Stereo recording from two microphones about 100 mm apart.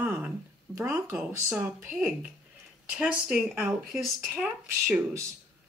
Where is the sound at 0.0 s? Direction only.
20° right (ahead or behind).